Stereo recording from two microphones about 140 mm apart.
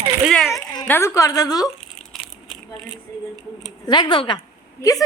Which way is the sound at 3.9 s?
35° left (ahead or behind).